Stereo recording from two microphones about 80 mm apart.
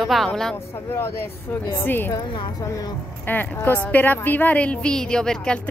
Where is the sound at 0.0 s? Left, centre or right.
Centre.